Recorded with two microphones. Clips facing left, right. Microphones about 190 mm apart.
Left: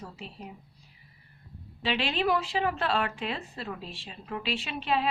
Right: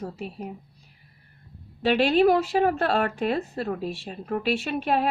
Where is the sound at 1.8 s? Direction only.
45° right (ahead or behind).